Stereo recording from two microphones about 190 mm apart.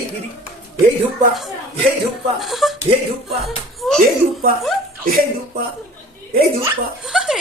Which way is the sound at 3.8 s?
Centre (ahead or behind).